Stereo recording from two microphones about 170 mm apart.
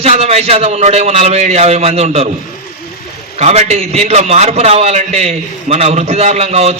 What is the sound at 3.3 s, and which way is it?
A man's voice, 40° right (ahead or behind).